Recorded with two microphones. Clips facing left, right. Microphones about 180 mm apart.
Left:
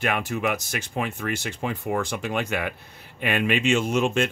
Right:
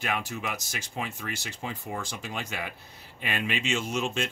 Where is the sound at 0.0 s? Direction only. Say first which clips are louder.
Left 7 dB; 55° left (ahead or behind).